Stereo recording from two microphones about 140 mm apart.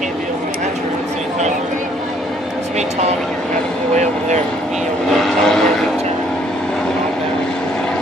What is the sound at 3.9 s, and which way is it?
Speech, 55° right (ahead or behind).